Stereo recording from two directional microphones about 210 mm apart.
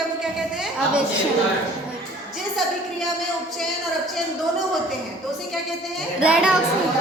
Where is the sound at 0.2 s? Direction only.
5° right (ahead or behind).